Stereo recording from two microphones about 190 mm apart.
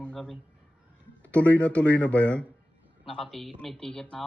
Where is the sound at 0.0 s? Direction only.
5° left (ahead or behind).